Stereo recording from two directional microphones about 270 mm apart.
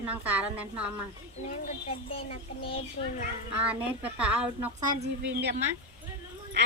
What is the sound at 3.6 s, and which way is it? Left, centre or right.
A woman's voice, centre.